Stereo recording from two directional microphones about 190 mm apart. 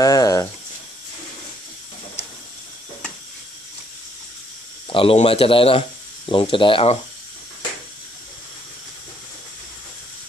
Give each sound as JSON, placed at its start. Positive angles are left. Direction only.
{"t": 0.0, "sound": "speech", "side_deg": 20}
{"t": 4.8, "sound": "speech", "side_deg": 30}